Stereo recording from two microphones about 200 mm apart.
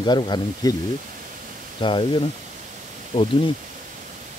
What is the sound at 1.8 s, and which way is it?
Speech, 25° left (ahead or behind).